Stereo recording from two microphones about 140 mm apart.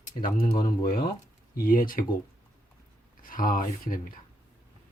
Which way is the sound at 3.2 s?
80° left.